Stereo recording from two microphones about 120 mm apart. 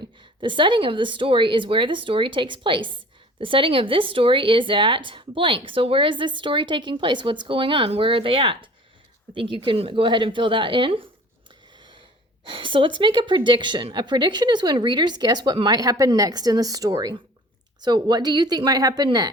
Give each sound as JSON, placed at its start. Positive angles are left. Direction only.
{"t": 0.0, "sound": "speech", "side_deg": -45}
{"t": 12.5, "sound": "a woman's voice", "side_deg": -45}